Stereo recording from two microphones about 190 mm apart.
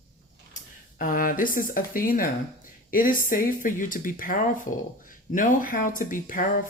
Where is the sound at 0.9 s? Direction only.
45° left (ahead or behind).